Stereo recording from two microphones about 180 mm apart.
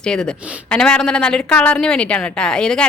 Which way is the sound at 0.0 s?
5° left (ahead or behind).